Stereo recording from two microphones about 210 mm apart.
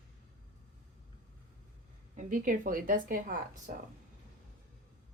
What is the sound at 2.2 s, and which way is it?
A woman's voice, 40° right (ahead or behind).